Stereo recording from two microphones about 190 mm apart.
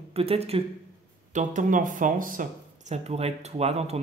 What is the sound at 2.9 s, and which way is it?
A man's voice, 35° right (ahead or behind).